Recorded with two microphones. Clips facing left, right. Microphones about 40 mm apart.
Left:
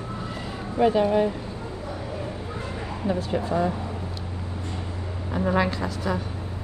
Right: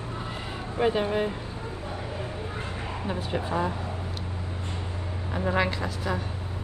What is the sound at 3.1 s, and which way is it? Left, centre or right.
Speech, right.